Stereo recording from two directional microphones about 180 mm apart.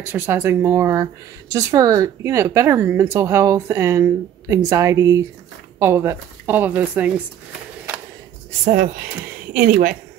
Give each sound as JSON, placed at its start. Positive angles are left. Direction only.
{"t": 0.0, "sound": "speech", "side_deg": -10}
{"t": 8.6, "sound": "speech", "side_deg": -45}